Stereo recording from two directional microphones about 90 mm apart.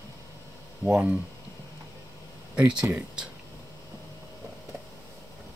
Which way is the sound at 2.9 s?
10° right (ahead or behind).